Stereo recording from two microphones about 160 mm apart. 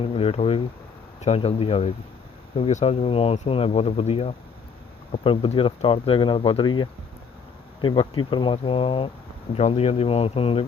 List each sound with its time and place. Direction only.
0.0 s speech: 35° left (ahead or behind)